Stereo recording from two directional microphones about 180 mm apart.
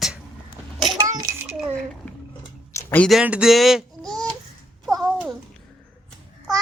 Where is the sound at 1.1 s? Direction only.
15° right (ahead or behind).